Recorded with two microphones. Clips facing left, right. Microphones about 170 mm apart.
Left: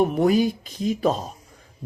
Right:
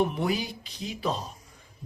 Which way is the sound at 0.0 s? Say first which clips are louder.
Left 8 dB; 45° left (ahead or behind).